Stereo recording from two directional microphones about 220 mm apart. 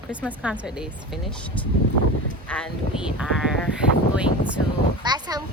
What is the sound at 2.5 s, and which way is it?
Speech, 5° left (ahead or behind).